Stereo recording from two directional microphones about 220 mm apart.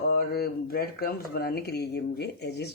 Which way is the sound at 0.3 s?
45° left (ahead or behind).